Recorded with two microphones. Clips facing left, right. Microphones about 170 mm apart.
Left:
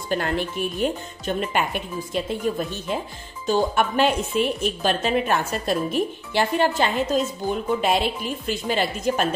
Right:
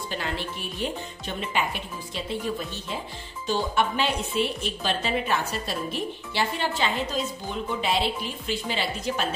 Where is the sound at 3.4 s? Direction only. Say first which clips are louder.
Left 4 dB; 50° left (ahead or behind).